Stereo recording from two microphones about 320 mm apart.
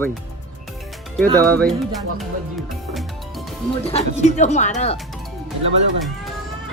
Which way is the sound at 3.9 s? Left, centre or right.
Left.